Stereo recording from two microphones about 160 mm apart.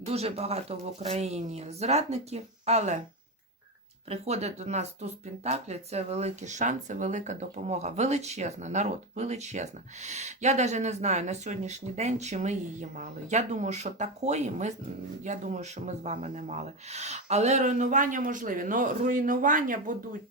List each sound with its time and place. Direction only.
0.0 s speech: 40° right (ahead or behind)
4.1 s speech: 45° right (ahead or behind)